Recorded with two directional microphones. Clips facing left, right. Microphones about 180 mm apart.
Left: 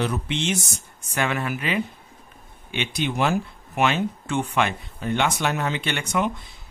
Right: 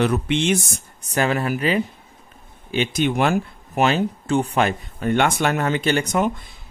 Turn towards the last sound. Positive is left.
turn(degrees=-40)  # may be behind; listen again after turning